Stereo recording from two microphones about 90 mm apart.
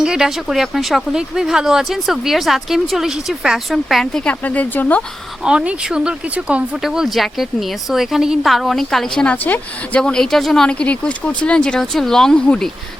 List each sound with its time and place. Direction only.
0.0 s speech: 5° right (ahead or behind); by 5.0 s 20° left (ahead or behind)
5.4 s speech: 10° right (ahead or behind)
6.8 s speech: 5° right (ahead or behind)
9.1 s speech: 15° left (ahead or behind)
10.0 s speech: 5° left (ahead or behind)